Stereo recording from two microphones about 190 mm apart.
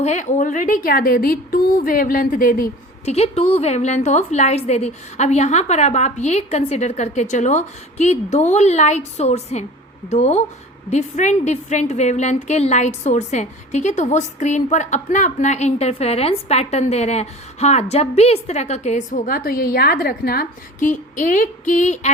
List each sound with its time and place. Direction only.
0.0 s a woman's voice: 40° left (ahead or behind)
3.1 s a woman's voice: 30° left (ahead or behind)